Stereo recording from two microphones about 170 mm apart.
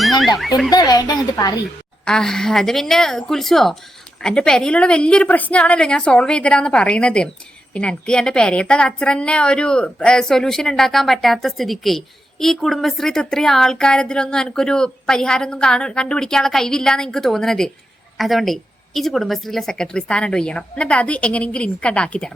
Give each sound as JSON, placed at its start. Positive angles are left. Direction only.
{"t": 0.3, "sound": "a woman's voice", "side_deg": 0}
{"t": 0.7, "sound": "speech", "side_deg": 20}
{"t": 2.0, "sound": "a woman's voice", "side_deg": 5}